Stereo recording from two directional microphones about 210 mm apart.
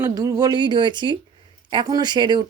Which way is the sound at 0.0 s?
15° right (ahead or behind).